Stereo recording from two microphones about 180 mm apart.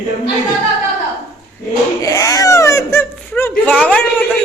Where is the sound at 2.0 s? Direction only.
20° left (ahead or behind).